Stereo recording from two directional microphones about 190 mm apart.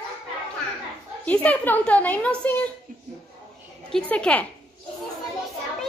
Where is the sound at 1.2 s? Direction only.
5° left (ahead or behind).